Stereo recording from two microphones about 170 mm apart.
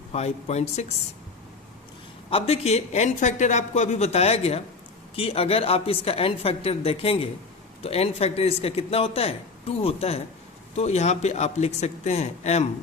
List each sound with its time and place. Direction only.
0.1 s speech: 40° left (ahead or behind)
2.3 s speech: 40° left (ahead or behind)